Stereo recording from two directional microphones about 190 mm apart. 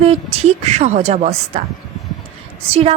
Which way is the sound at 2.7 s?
30° right (ahead or behind).